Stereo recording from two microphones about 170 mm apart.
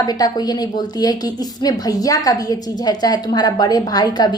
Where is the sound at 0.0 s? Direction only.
25° left (ahead or behind).